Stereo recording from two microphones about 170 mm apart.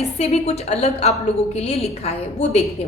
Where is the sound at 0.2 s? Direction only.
40° left (ahead or behind).